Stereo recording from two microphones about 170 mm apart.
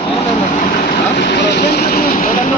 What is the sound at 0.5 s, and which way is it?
Vehicle, 65° left (ahead or behind).